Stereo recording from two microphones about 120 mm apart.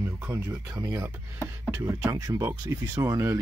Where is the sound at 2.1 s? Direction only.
30° right (ahead or behind).